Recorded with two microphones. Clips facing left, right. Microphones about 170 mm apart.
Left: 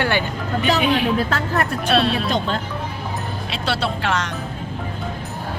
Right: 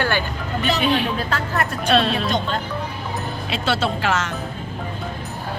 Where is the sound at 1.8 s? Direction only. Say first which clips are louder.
Right 2 dB; 5° left (ahead or behind).